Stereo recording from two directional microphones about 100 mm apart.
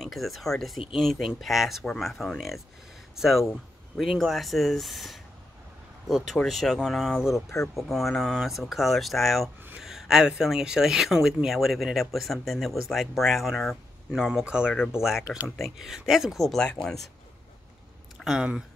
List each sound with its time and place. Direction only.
0.0 s speech: centre (ahead or behind)
7.3 s speech: 30° left (ahead or behind)
7.6 s speech: centre (ahead or behind)
18.2 s speech: 5° right (ahead or behind)